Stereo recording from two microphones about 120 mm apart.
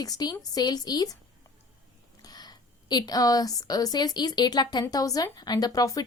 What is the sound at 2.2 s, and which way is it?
A woman's voice, 35° left (ahead or behind).